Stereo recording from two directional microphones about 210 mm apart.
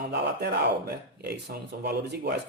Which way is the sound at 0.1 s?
50° right (ahead or behind).